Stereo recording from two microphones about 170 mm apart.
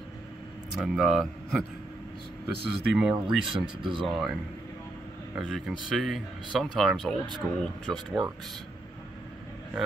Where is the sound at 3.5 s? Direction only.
30° right (ahead or behind).